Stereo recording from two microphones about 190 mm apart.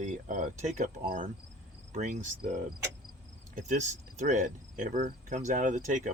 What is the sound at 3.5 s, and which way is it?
Cricket, 40° right (ahead or behind).